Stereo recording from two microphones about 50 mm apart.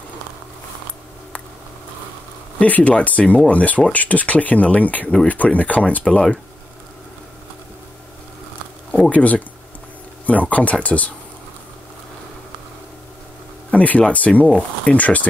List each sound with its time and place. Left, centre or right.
2.6 s speech: left
9.1 s speech: left
13.7 s speech: left